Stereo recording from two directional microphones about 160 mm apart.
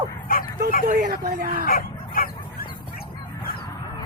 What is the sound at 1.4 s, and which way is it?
Speech, 60° right (ahead or behind).